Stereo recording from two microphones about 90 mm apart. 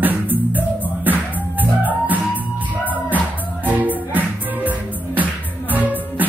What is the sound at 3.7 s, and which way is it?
Music, 20° right (ahead or behind).